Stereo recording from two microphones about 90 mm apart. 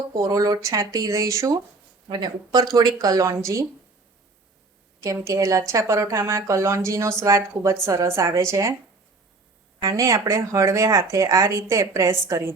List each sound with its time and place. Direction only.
0.2 s speech: 45° right (ahead or behind)
2.0 s speech: 55° right (ahead or behind); by 3.7 s 35° right (ahead or behind)
5.0 s speech: 35° right (ahead or behind)
9.8 s speech: 35° right (ahead or behind)